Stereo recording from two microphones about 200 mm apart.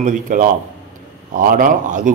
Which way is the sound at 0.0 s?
40° right (ahead or behind).